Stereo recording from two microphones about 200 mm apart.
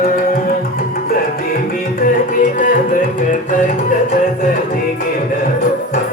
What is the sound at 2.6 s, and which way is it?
Music, 40° left (ahead or behind).